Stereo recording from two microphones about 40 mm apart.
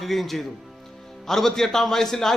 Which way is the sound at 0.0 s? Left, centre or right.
Centre.